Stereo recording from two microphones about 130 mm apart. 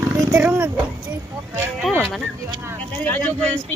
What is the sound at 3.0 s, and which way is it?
Speech, 15° left (ahead or behind).